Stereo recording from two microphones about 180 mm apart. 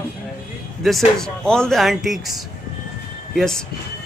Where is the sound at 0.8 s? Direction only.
Centre (ahead or behind).